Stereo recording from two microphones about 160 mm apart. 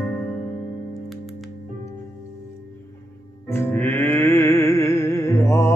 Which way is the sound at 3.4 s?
15° left (ahead or behind).